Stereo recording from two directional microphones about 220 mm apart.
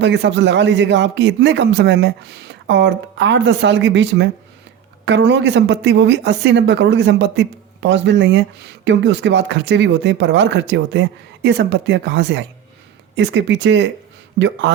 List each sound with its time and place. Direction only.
0.0 s a woman's voice: 55° right (ahead or behind)